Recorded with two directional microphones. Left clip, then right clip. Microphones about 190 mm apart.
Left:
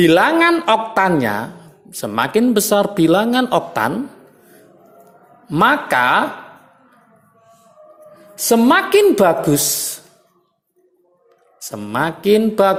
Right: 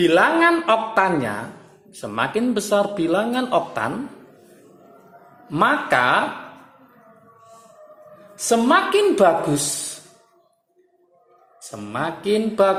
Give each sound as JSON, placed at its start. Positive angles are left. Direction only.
{"t": 0.0, "sound": "a woman's voice", "side_deg": 35}
{"t": 5.5, "sound": "a woman's voice", "side_deg": 40}
{"t": 8.4, "sound": "a woman's voice", "side_deg": 40}
{"t": 11.7, "sound": "speech", "side_deg": 45}